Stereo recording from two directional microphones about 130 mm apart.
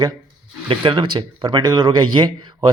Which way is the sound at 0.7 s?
40° right (ahead or behind).